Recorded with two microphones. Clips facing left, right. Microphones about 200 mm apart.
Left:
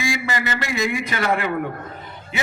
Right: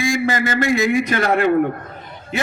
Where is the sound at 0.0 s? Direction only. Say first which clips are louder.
Right 5 dB; 45° right (ahead or behind).